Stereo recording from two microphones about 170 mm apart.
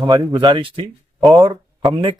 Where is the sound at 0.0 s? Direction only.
20° right (ahead or behind).